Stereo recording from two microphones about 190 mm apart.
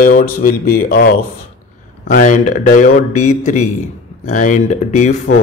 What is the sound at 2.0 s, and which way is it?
A man's voice, 40° left (ahead or behind).